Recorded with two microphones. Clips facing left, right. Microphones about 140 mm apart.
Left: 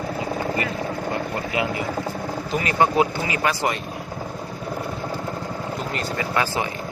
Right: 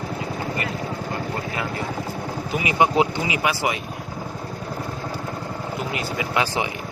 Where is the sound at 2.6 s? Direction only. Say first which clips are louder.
Even; 15° right (ahead or behind).